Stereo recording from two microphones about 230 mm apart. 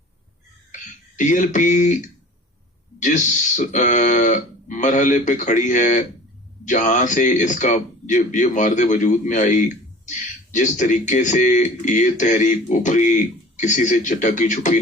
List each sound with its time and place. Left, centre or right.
0.7 s speech: left